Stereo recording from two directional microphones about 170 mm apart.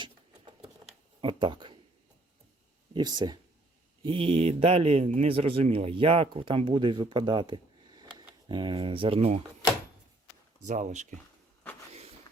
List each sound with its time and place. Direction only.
0.0 s patter: 25° right (ahead or behind)
1.2 s speech: 30° right (ahead or behind)
2.9 s a man's voice: 25° right (ahead or behind)
10.6 s speech: 45° right (ahead or behind)
11.9 s a sound: 40° right (ahead or behind)